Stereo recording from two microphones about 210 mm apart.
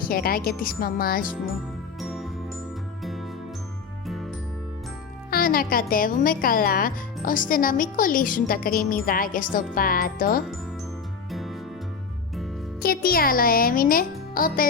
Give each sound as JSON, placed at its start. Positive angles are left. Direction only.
{"t": 0.1, "sound": "speech", "side_deg": 45}
{"t": 2.0, "sound": "music", "side_deg": 0}
{"t": 5.3, "sound": "speech", "side_deg": 45}
{"t": 11.3, "sound": "music", "side_deg": 0}
{"t": 12.8, "sound": "speech", "side_deg": 45}